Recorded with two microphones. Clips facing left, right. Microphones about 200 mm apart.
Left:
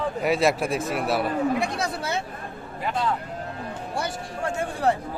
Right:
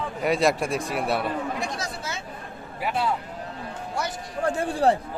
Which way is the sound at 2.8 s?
10° right (ahead or behind).